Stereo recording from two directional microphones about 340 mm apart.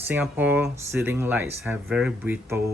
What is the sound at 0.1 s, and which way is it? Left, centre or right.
Speech, centre.